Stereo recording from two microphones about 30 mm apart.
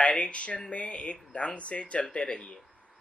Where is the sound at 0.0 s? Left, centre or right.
Left.